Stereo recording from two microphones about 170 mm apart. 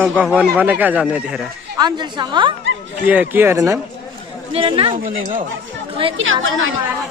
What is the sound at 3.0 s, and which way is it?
Speech, 10° right (ahead or behind).